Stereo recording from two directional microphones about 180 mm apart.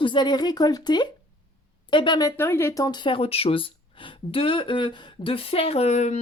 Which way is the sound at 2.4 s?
15° left (ahead or behind).